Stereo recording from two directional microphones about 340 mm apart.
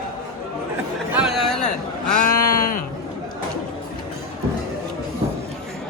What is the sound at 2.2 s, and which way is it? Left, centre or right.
Sheep, left.